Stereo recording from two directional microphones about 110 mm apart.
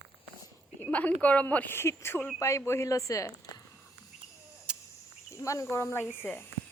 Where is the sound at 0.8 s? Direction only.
15° left (ahead or behind).